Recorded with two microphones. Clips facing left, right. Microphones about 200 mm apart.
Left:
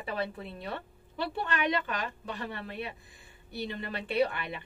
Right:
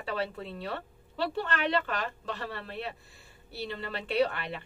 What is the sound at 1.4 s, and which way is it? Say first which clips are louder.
A woman's voice: right 1 dB; 15° left (ahead or behind).